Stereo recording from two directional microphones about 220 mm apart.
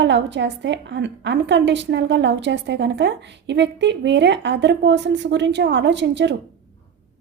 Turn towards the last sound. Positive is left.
turn(degrees=-55)  # may be behind; listen again after turning